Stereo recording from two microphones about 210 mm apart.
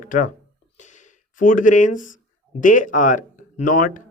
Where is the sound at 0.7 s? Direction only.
35° left (ahead or behind).